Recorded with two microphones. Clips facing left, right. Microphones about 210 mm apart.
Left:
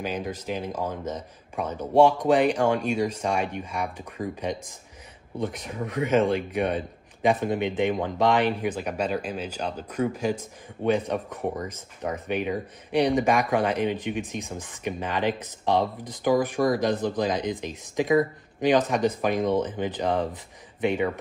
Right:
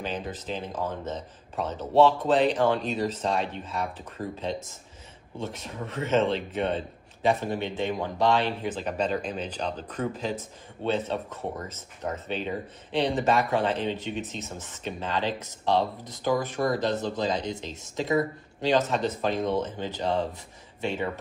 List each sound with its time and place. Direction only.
0.0 s speech: 10° left (ahead or behind)